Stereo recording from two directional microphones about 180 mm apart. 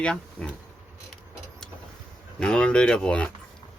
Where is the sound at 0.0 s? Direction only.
5° left (ahead or behind).